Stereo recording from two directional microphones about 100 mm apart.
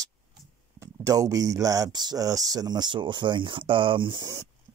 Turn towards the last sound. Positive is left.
turn(degrees=-55)  # may be behind; listen again after turning